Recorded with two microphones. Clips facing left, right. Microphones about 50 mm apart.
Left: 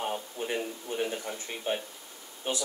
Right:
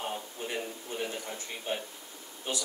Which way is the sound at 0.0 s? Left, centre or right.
Centre.